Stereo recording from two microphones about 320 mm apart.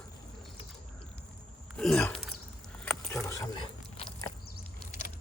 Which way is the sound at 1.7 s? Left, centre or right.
Centre.